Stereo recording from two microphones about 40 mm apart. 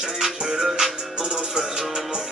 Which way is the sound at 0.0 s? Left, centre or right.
Centre.